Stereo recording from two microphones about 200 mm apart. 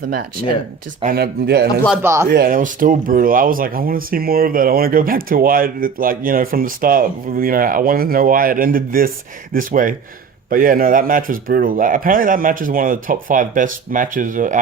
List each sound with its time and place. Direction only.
1.0 s speech: 50° right (ahead or behind)
2.0 s speech: 15° right (ahead or behind)
2.3 s speech: 45° right (ahead or behind)